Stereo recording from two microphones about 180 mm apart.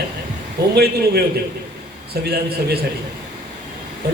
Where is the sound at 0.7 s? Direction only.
65° right (ahead or behind).